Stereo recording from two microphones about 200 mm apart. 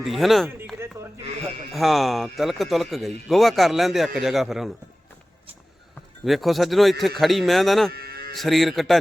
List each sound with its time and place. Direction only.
0.0 s speech: centre (ahead or behind)
0.8 s a sound: 15° right (ahead or behind)
1.7 s speech: centre (ahead or behind)
6.2 s speech: centre (ahead or behind)
7.9 s cattle: 50° right (ahead or behind)
8.4 s speech: centre (ahead or behind)